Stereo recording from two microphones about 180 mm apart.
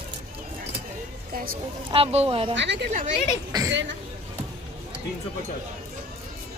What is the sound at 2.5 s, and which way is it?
Speech, 75° right (ahead or behind).